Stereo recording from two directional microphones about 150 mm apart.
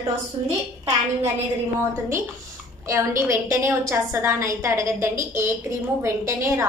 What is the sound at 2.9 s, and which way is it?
A woman's voice, 20° right (ahead or behind).